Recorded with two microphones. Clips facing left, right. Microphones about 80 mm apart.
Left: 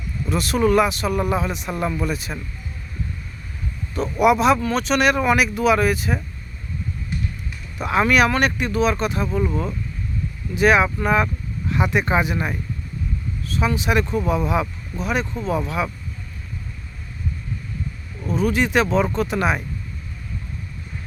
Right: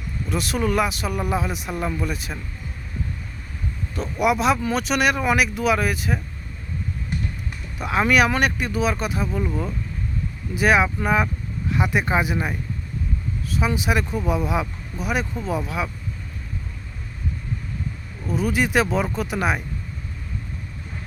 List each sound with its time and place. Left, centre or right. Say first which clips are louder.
0.3 s speech: left 5 dB; centre
3.9 s speech: left 4 dB; centre
7.8 s speech: left 1 dB; centre
10.5 s speech: left 2 dB; centre
18.3 s speech: left 2 dB; centre